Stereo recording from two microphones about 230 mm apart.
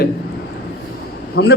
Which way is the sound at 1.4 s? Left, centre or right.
Left.